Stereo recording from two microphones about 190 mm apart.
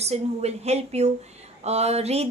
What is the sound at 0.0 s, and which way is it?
A woman's voice, 35° right (ahead or behind).